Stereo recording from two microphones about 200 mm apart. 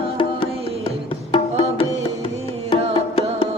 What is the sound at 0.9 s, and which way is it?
Music, 25° left (ahead or behind).